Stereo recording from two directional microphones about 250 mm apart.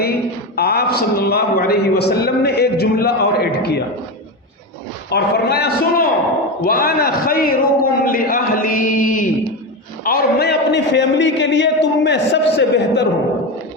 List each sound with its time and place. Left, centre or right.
0.5 s a man's voice: left
5.0 s a man's voice: left